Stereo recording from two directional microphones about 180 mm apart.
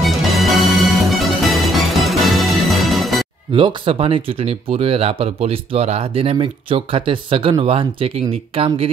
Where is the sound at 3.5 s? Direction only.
30° right (ahead or behind).